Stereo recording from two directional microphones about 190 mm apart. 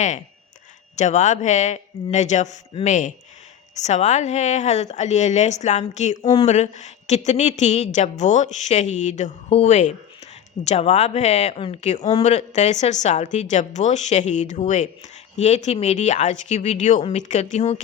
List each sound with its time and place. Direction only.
0.9 s speech: 40° left (ahead or behind)